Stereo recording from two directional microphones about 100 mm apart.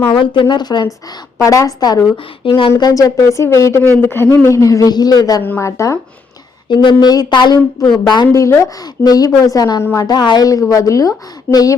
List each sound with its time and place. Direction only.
0.1 s speech: 60° left (ahead or behind)
0.4 s speech: 45° left (ahead or behind)
2.4 s speech: 60° left (ahead or behind); by 5.4 s 40° left (ahead or behind)
5.4 s speech: 20° left (ahead or behind)
5.6 s speech: 30° left (ahead or behind)
6.7 s speech: 45° left (ahead or behind)
8.3 s speech: 30° left (ahead or behind)
11.5 s speech: 15° left (ahead or behind)